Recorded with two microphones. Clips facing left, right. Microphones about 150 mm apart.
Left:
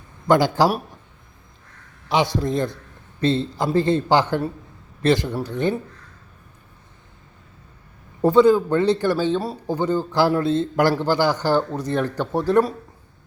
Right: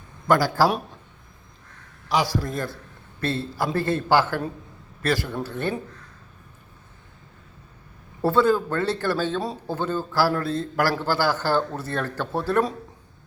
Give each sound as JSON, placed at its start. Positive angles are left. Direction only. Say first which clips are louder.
{"t": 0.3, "sound": "a man's voice", "louder": "left 3 dB", "side_deg": 20}
{"t": 2.0, "sound": "a man's voice", "louder": "left 3 dB", "side_deg": 25}
{"t": 8.2, "sound": "a man's voice", "louder": "left 5 dB", "side_deg": 15}